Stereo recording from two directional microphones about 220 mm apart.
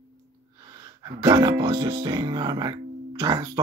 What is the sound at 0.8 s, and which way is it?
Speech, 20° right (ahead or behind).